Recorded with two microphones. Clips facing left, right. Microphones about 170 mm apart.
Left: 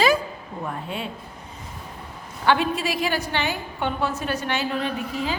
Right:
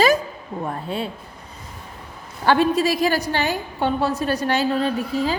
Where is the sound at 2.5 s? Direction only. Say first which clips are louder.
Right 4 dB; 40° right (ahead or behind).